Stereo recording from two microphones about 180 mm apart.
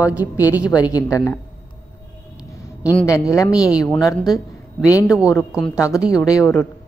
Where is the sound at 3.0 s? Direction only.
15° left (ahead or behind).